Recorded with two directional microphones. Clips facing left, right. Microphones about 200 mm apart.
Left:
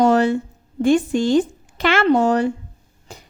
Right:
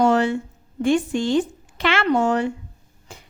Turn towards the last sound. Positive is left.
turn(degrees=40)  # may be behind; listen again after turning